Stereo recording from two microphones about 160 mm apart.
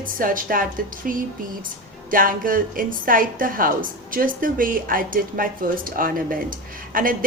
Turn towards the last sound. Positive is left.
turn(degrees=-60)  # may be behind; listen again after turning